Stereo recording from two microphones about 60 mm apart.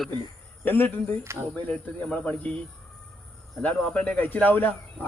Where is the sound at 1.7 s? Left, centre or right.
Centre.